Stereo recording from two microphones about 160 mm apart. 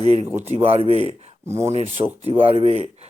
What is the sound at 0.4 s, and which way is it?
Speech, 40° right (ahead or behind).